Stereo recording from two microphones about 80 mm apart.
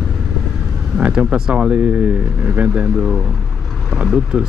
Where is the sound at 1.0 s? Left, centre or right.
Centre.